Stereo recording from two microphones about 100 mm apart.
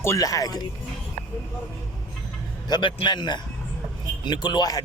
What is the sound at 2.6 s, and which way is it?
Speech, 50° left (ahead or behind).